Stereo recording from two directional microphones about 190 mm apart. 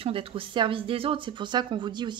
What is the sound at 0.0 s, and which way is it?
Speech, 30° right (ahead or behind).